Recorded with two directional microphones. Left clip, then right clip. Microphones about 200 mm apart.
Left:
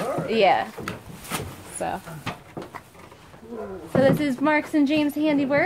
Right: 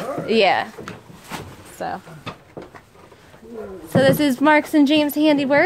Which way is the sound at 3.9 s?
55° right (ahead or behind).